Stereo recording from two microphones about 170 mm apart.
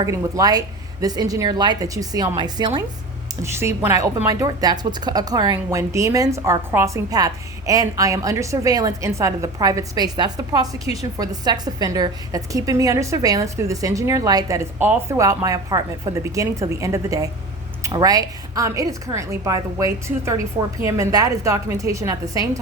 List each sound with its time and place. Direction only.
0.0 s a woman's voice: 20° right (ahead or behind)
3.4 s a woman's voice: 15° right (ahead or behind)